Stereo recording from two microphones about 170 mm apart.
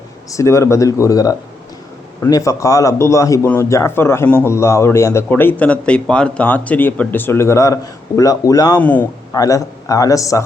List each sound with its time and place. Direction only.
0.3 s a man's voice: 15° left (ahead or behind)
8.8 s a man's voice: 10° left (ahead or behind)
9.3 s speech: 20° left (ahead or behind)